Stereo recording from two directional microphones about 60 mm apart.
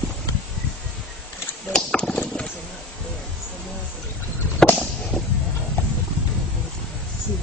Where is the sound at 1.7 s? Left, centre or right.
Centre.